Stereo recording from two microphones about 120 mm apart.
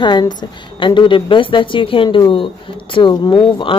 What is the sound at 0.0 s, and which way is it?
A woman's voice, 40° left (ahead or behind).